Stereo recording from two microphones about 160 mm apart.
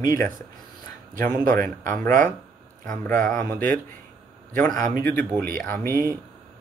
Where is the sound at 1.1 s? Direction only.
60° right (ahead or behind).